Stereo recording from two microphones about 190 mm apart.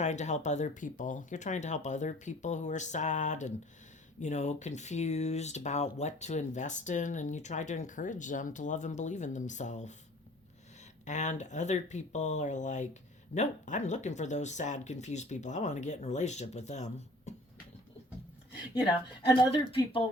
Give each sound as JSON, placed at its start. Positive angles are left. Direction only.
{"t": 0.0, "sound": "speech", "side_deg": 40}
{"t": 11.0, "sound": "speech", "side_deg": 40}
{"t": 19.7, "sound": "speech", "side_deg": 25}